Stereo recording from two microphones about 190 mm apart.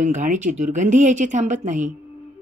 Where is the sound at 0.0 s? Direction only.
40° right (ahead or behind).